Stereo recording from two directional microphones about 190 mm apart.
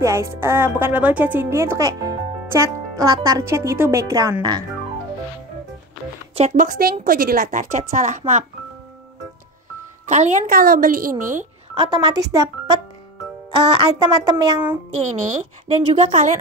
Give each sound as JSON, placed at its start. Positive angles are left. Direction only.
{"t": 0.0, "sound": "a woman's voice", "side_deg": -15}
{"t": 6.3, "sound": "a woman's voice", "side_deg": -40}
{"t": 10.0, "sound": "a woman's voice", "side_deg": -40}
{"t": 11.7, "sound": "speech", "side_deg": -25}
{"t": 15.7, "sound": "a woman's voice", "side_deg": -30}